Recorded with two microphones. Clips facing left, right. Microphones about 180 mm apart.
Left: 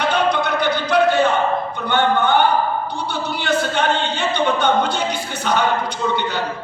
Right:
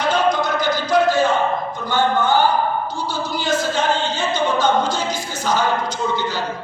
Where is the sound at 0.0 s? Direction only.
65° left (ahead or behind).